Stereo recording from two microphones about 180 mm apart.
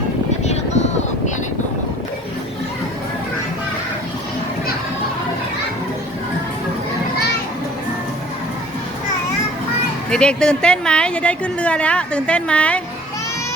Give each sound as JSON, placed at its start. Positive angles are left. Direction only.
{"t": 0.4, "sound": "vehicle", "side_deg": 40}
{"t": 10.1, "sound": "a woman's voice", "side_deg": 5}